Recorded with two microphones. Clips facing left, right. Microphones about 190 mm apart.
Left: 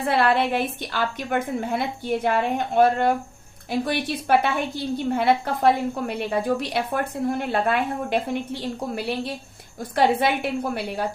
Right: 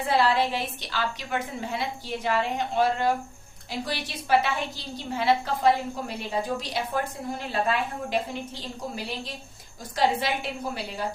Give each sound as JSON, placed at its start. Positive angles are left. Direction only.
{"t": 0.0, "sound": "a woman's voice", "side_deg": 60}
{"t": 9.9, "sound": "a woman's voice", "side_deg": 55}